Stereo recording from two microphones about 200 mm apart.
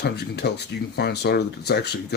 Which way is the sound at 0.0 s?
55° left (ahead or behind).